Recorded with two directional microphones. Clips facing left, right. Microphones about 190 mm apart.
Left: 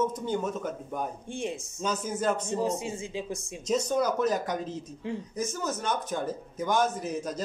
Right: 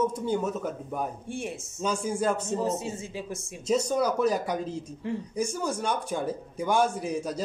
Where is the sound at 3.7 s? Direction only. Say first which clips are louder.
Right 1 dB; 10° right (ahead or behind).